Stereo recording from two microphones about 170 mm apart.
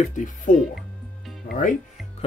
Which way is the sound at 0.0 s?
45° left (ahead or behind).